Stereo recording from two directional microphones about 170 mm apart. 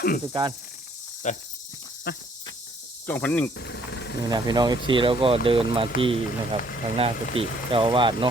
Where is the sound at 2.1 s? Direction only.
70° left (ahead or behind).